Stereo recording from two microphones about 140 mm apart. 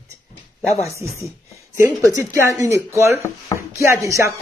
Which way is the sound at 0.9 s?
20° right (ahead or behind).